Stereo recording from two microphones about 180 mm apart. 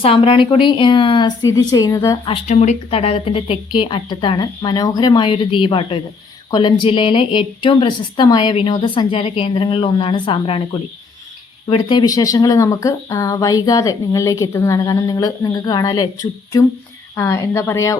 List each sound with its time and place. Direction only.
0.0 s speech: 30° left (ahead or behind)
2.2 s speech: 35° left (ahead or behind)
11.7 s speech: 25° left (ahead or behind)